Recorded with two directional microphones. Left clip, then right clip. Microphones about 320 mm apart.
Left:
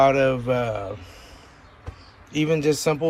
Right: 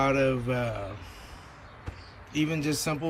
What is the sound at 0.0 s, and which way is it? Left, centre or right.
Speech, centre.